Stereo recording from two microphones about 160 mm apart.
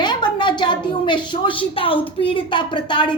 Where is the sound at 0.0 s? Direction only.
25° left (ahead or behind).